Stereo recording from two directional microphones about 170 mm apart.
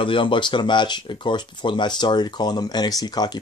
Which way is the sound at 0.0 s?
30° left (ahead or behind).